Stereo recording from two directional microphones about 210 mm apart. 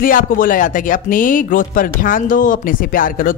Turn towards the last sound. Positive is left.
turn(degrees=40)  # may be behind; listen again after turning